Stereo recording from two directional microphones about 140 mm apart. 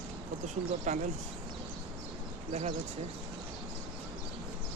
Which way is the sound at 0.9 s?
55° right (ahead or behind).